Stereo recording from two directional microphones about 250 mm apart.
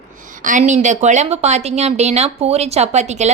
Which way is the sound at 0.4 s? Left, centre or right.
Right.